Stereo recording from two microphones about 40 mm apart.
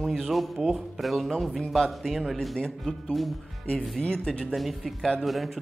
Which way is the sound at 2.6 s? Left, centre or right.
Centre.